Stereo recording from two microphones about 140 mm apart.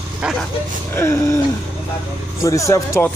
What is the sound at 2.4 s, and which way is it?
Speech, 20° left (ahead or behind).